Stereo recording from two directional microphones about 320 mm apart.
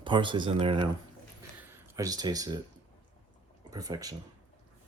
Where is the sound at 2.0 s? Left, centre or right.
Centre.